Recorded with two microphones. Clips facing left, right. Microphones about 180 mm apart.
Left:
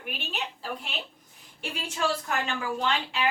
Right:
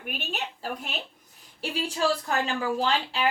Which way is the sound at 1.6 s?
35° right (ahead or behind).